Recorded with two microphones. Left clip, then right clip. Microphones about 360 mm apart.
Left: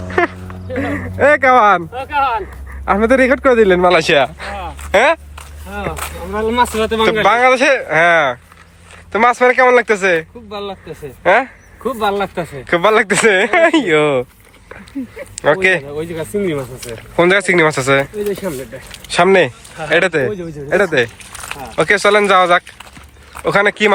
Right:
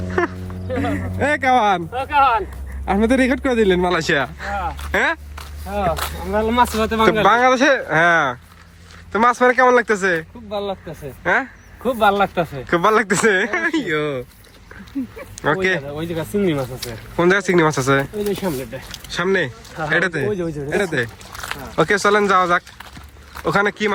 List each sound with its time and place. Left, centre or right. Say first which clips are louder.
0.7 s speech: left 2 dB; centre
6.3 s speech: left 2 dB; centre
11.2 s vehicle: left 7 dB; centre
12.0 s speech: right 2 dB; centre
12.6 s speech: left 5 dB; centre
15.4 s speech: left 6 dB; centre
16.1 s speech: left 1 dB; centre
17.2 s speech: left 4 dB; centre